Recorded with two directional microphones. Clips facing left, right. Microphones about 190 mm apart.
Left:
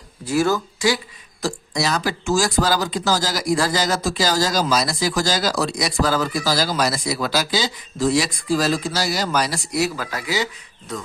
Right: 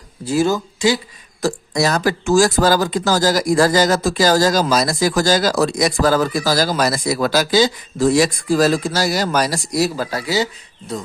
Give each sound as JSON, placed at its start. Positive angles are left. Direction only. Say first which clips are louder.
{"t": 0.3, "sound": "speech", "louder": "right 2 dB", "side_deg": -20}
{"t": 1.4, "sound": "speech", "louder": "right 5 dB", "side_deg": -50}